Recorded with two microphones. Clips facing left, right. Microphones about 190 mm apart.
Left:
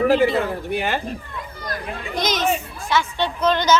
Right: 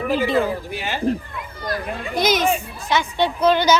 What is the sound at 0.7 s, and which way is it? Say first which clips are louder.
Speech: left 5 dB; 55° left (ahead or behind).